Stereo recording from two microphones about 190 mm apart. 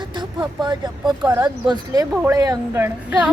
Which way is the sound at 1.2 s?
10° right (ahead or behind).